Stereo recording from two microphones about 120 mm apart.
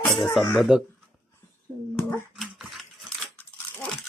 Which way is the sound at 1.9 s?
20° left (ahead or behind).